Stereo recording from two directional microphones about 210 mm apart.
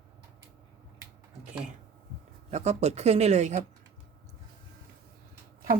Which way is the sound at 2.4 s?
30° right (ahead or behind).